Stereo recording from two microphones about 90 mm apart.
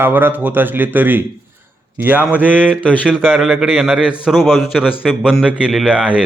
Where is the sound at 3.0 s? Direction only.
15° right (ahead or behind).